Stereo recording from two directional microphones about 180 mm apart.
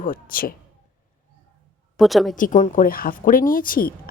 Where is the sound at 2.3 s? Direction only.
45° left (ahead or behind).